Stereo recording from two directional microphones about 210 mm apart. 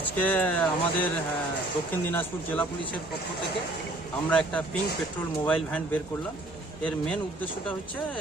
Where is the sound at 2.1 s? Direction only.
5° left (ahead or behind).